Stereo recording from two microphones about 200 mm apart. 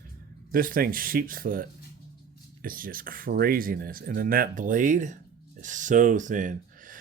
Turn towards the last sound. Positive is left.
turn(degrees=-40)  # may be behind; listen again after turning